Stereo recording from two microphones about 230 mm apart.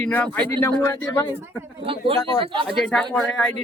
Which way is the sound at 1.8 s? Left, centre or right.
Right.